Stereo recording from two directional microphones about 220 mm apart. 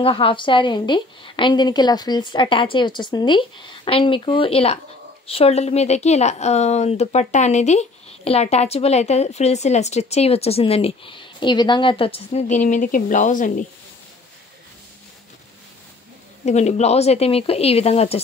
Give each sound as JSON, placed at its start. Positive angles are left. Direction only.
{"t": 0.0, "sound": "a woman's voice", "side_deg": 25}
{"t": 16.4, "sound": "a woman's voice", "side_deg": 30}